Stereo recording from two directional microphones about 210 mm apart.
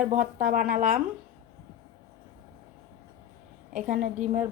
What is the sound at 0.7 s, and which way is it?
Speech, 40° right (ahead or behind).